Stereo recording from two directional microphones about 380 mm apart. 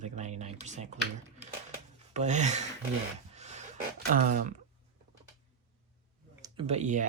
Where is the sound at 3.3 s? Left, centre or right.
Centre.